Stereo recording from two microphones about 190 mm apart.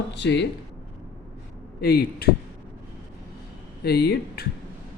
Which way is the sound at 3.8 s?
55° left (ahead or behind).